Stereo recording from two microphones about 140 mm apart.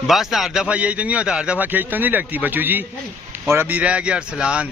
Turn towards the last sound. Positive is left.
turn(degrees=-5)  # may be behind; listen again after turning